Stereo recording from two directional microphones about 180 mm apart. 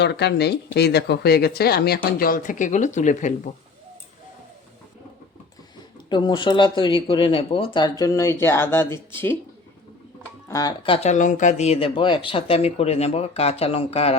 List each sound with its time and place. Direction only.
0.0 s speech: 70° left (ahead or behind); by 3.5 s 45° left (ahead or behind)
6.1 s speech: 25° left (ahead or behind)
10.5 s speech: 20° left (ahead or behind)